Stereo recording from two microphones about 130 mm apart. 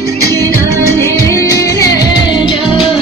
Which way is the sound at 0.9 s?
20° left (ahead or behind).